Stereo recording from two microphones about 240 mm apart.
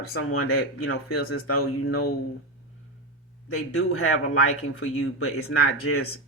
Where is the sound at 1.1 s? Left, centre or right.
Left.